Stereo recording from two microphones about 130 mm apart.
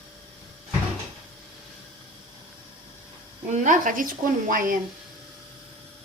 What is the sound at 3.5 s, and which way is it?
Speech, 80° right.